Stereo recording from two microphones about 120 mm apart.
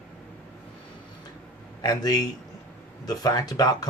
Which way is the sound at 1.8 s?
30° left (ahead or behind).